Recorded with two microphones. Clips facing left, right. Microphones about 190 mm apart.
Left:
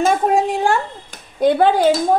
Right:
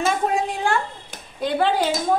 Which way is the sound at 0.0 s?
45° left (ahead or behind).